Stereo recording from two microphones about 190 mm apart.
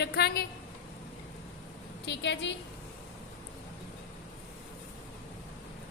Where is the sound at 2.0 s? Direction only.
65° left (ahead or behind).